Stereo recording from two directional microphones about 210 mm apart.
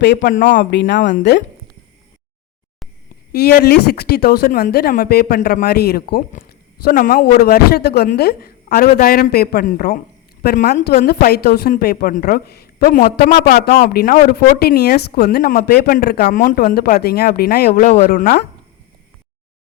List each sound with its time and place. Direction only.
0.0 s speech: 45° left (ahead or behind)
0.7 s speech: 60° left (ahead or behind)
3.3 s speech: 50° left (ahead or behind)
13.5 s speech: 45° left (ahead or behind)
17.7 s speech: 30° left (ahead or behind)
18.0 s speech: 45° left (ahead or behind)